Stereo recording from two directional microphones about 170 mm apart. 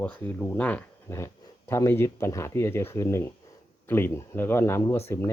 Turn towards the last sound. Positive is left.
turn(degrees=15)  # may be behind; listen again after turning